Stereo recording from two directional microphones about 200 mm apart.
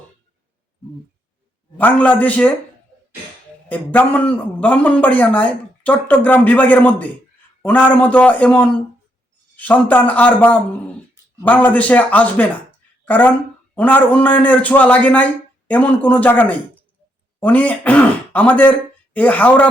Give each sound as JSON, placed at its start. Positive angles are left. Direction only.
{"t": 1.8, "sound": "a man's voice", "side_deg": 10}
{"t": 3.7, "sound": "a man's voice", "side_deg": 10}